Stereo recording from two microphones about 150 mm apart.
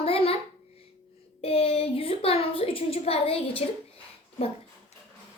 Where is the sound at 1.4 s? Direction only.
40° left (ahead or behind).